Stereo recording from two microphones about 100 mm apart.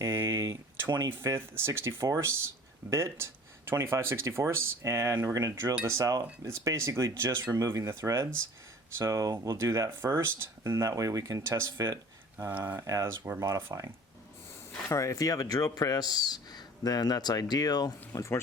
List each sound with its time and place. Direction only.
0.0 s a sound: 30° right (ahead or behind)
0.9 s speech: 40° right (ahead or behind)
1.2 s speech: 25° right (ahead or behind)
14.8 s speech: 30° left (ahead or behind)